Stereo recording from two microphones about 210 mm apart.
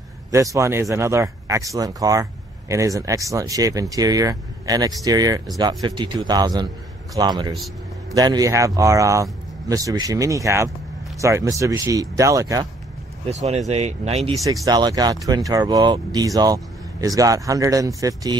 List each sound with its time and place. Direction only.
0.3 s speech: 15° right (ahead or behind)
13.3 s speech: 30° right (ahead or behind)
14.4 s speech: 15° right (ahead or behind)